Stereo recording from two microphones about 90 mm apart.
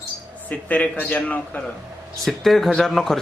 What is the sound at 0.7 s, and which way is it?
Speech, 15° left (ahead or behind).